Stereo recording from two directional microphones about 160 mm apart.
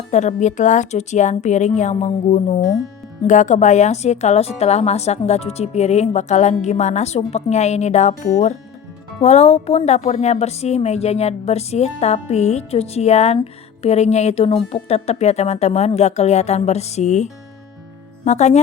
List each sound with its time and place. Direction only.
0.1 s a woman's voice: 45° left (ahead or behind)
18.3 s a woman's voice: 45° left (ahead or behind)